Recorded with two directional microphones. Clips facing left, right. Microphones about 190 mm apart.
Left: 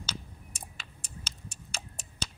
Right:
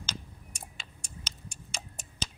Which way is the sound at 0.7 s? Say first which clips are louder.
Even; 5° left (ahead or behind).